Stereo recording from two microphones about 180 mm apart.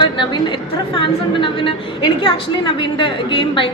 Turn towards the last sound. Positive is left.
turn(degrees=25)  # may be behind; listen again after turning